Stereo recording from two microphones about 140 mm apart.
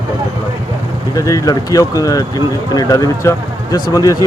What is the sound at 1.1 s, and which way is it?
Speech, 25° left (ahead or behind).